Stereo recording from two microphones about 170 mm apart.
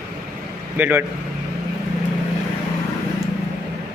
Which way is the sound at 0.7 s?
10° right (ahead or behind).